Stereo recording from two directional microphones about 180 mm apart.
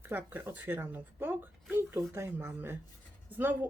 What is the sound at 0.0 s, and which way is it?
A woman's voice, 10° right (ahead or behind).